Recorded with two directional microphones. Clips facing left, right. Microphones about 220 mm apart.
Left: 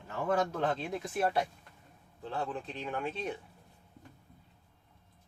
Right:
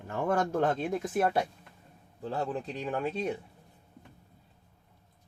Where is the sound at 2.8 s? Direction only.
40° right (ahead or behind).